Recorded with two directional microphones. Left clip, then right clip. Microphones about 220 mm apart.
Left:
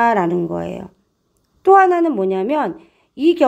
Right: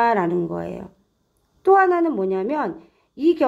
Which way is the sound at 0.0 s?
35° left (ahead or behind).